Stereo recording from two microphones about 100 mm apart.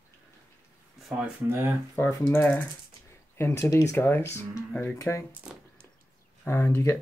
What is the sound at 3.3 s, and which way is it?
Speech, 25° left (ahead or behind).